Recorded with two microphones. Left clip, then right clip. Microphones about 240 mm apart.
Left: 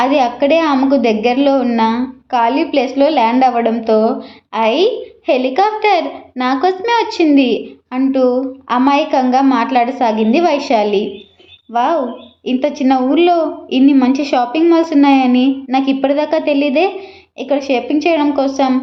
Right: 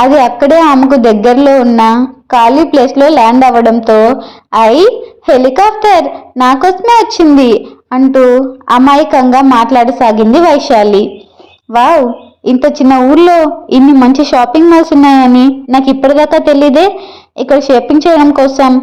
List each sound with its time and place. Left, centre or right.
0.0 s a woman's voice: right